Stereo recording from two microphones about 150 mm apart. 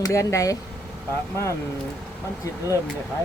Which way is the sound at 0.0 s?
20° left (ahead or behind).